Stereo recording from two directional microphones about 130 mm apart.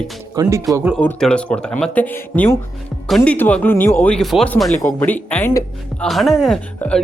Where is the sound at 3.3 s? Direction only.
10° left (ahead or behind).